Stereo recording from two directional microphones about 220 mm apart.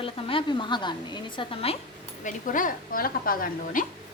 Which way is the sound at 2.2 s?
35° left (ahead or behind).